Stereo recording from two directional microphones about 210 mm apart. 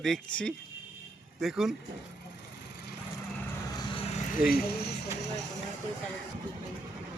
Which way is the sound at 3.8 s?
25° left (ahead or behind).